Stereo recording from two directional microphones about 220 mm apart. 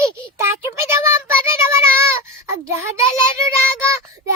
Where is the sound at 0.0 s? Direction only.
15° right (ahead or behind).